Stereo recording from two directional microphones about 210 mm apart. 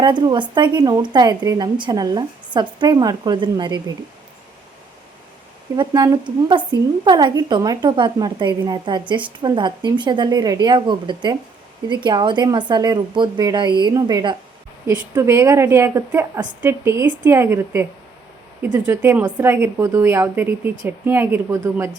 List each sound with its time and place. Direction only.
0.0 s a woman's voice: 20° right (ahead or behind)
5.7 s a woman's voice: 20° right (ahead or behind)
18.9 s a woman's voice: 10° right (ahead or behind)